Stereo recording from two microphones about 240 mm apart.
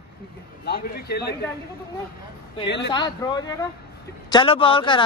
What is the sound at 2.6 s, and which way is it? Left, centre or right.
Speech, left.